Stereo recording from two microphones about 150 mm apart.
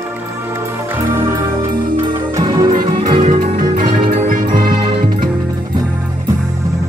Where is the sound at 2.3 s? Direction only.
25° right (ahead or behind).